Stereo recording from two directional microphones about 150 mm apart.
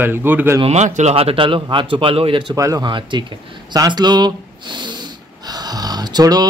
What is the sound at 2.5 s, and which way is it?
Speech, 20° right (ahead or behind).